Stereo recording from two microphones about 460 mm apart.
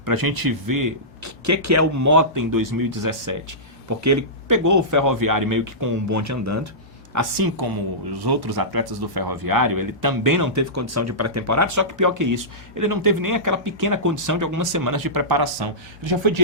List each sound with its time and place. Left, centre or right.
0.0 s speech: right